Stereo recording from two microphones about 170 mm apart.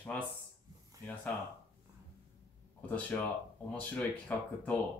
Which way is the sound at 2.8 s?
10° left (ahead or behind).